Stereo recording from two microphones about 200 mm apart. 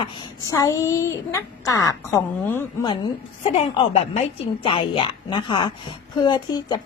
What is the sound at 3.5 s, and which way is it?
A woman's voice, 30° left (ahead or behind).